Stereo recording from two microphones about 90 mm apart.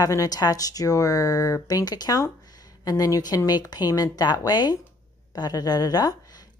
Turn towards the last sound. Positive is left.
turn(degrees=45)  # may be behind; listen again after turning